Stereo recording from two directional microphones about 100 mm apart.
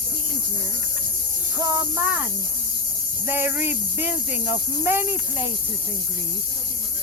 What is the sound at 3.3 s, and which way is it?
Speech, 20° right (ahead or behind).